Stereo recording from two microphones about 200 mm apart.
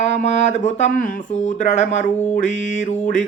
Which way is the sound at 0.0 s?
35° left (ahead or behind).